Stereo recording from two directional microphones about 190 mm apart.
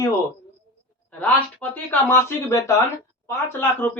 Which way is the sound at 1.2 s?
10° left (ahead or behind).